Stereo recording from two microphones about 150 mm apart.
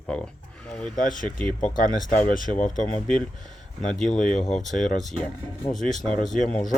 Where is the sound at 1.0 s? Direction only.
60° left (ahead or behind).